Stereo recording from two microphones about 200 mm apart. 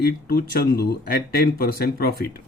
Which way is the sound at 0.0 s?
50° left (ahead or behind).